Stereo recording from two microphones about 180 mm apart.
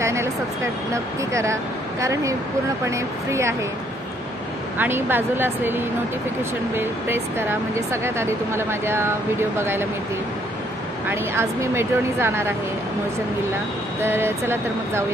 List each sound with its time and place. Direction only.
0.0 s a sound: 15° right (ahead or behind)
1.3 s speech: 15° right (ahead or behind)
4.7 s speech: 10° right (ahead or behind)
11.1 s speech: 15° right (ahead or behind)
14.0 s speech: 15° right (ahead or behind)